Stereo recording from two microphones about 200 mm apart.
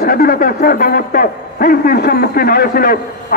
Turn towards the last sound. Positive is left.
turn(degrees=45)  # may be behind; listen again after turning